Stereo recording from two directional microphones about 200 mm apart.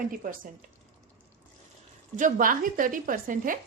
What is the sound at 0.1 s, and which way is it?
Speech, 45° right (ahead or behind).